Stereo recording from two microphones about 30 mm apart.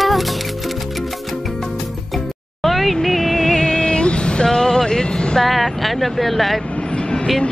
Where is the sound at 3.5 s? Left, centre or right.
Left.